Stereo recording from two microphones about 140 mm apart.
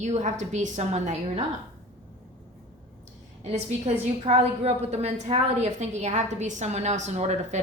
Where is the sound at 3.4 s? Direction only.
55° right (ahead or behind).